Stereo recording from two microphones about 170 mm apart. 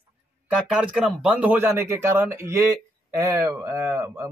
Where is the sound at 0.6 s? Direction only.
5° right (ahead or behind).